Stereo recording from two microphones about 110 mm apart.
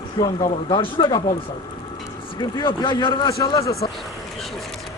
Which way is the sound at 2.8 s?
50° left (ahead or behind).